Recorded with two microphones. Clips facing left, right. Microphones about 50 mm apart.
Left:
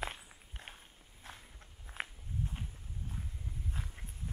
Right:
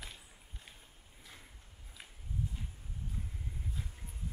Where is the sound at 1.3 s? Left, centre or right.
Left.